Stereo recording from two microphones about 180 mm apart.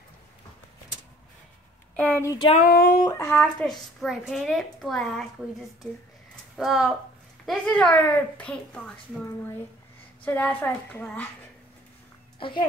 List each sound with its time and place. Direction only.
2.0 s a woman's voice: 10° left (ahead or behind)
2.5 s a sound: 55° left (ahead or behind)
3.0 s a child's voice: 15° left (ahead or behind)
6.5 s a child's voice: centre (ahead or behind)
10.2 s a woman's voice: 10° left (ahead or behind)
12.4 s a child's voice: 30° left (ahead or behind)